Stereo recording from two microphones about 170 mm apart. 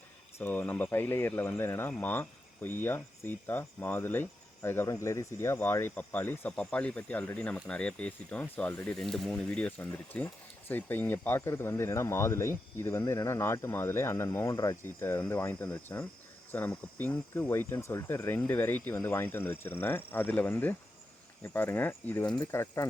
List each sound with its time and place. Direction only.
0.3 s speech: 10° left (ahead or behind)
22.3 s speech: 25° left (ahead or behind)